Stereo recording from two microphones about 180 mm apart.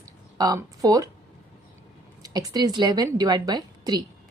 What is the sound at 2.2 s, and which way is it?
A woman's voice, 20° right (ahead or behind).